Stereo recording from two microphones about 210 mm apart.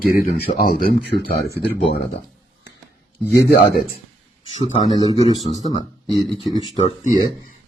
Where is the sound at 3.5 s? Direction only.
45° left (ahead or behind).